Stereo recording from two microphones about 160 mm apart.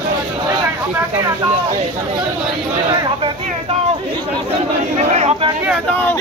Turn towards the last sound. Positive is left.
turn(degrees=-40)  # may be behind; listen again after turning